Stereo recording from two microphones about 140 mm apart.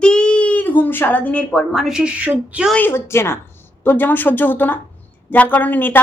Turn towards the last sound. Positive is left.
turn(degrees=15)  # may be behind; listen again after turning